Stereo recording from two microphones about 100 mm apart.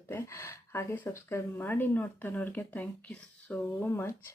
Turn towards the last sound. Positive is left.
turn(degrees=15)  # may be behind; listen again after turning